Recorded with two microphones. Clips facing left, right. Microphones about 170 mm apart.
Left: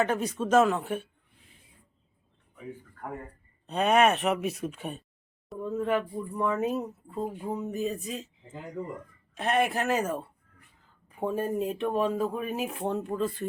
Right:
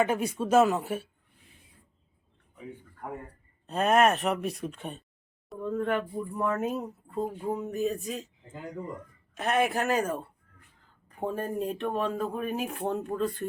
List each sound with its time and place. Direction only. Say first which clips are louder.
0.0 s speech: right 1 dB; 10° right (ahead or behind)
3.7 s speech: even; centre (ahead or behind)
9.4 s speech: even; centre (ahead or behind)